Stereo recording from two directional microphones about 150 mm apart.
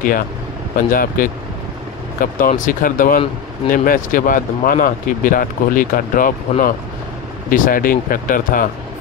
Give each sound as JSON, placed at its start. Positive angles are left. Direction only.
{"t": 0.7, "sound": "speech", "side_deg": 65}
{"t": 7.4, "sound": "speech", "side_deg": 65}